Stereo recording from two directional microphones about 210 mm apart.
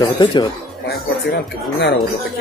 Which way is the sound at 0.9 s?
50° left (ahead or behind).